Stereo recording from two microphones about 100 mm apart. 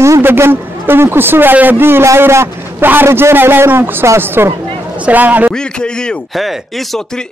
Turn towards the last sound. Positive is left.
turn(degrees=0)  # may be behind; listen again after turning